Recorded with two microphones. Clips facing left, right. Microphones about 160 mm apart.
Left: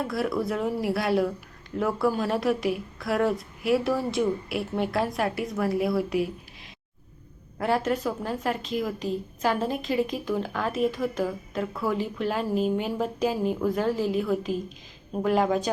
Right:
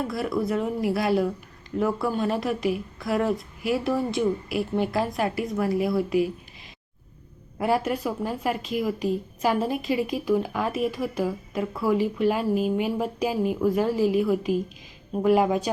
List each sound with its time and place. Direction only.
0.1 s a woman's voice: centre (ahead or behind)
7.6 s a woman's voice: 10° right (ahead or behind)